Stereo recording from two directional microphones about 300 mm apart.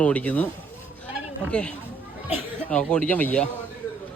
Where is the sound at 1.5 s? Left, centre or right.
Centre.